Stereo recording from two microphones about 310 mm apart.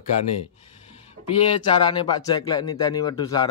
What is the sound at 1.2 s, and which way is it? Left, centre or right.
Speech, centre.